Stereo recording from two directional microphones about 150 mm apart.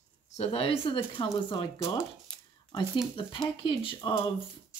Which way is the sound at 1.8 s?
5° left (ahead or behind).